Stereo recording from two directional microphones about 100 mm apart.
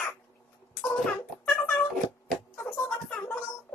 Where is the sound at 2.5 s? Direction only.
20° left (ahead or behind).